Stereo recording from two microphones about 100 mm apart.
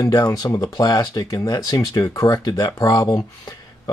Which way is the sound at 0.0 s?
40° left (ahead or behind).